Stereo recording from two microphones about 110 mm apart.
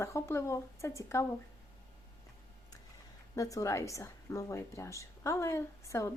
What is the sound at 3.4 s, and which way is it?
Speech, 30° left (ahead or behind).